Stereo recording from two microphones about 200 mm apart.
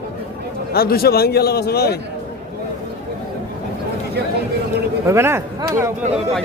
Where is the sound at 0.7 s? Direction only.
50° left (ahead or behind).